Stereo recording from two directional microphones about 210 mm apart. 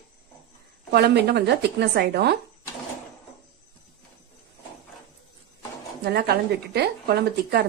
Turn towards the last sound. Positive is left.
turn(degrees=-50)  # may be behind; listen again after turning